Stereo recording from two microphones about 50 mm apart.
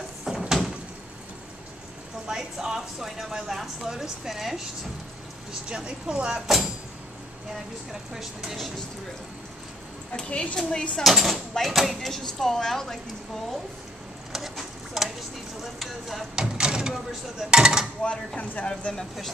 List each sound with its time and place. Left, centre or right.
0.2 s door: centre
2.2 s speech: centre
5.5 s speech: centre
8.5 s chopping: centre
10.1 s speech: centre
11.1 s chopping: centre
11.5 s speech: centre
14.3 s a sound: centre
15.6 s chopping: centre
16.3 s a sound: centre
17.4 s speech: centre
18.0 s speech: left